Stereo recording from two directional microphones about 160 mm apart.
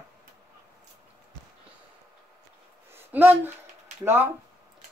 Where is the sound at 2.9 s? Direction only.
10° right (ahead or behind).